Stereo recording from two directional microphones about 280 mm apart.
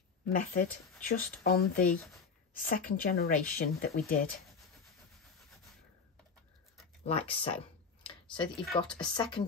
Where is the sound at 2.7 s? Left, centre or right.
Left.